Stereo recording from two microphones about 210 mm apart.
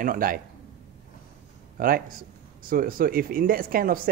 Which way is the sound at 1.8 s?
45° right (ahead or behind).